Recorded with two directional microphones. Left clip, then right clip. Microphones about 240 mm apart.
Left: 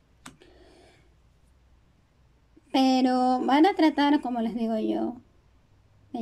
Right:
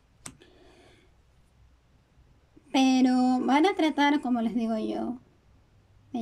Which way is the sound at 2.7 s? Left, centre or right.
Centre.